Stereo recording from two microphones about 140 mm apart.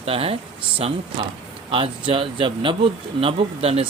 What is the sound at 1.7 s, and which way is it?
Speech, 40° right (ahead or behind).